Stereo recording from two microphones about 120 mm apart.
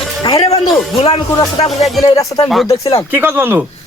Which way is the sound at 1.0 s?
45° left (ahead or behind).